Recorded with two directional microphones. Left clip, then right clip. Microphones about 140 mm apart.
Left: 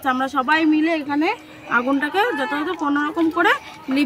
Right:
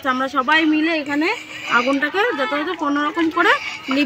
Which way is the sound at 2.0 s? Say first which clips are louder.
Right 1 dB; 40° left (ahead or behind).